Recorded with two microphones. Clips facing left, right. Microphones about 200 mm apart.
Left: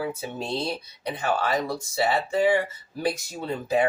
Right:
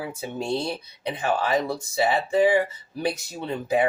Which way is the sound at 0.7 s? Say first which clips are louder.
Right 1 dB; 20° right (ahead or behind).